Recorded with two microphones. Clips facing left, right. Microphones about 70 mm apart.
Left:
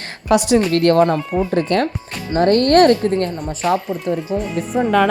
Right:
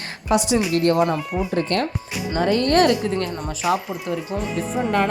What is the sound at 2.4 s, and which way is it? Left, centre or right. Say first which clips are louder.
Speech: left 6 dB; left.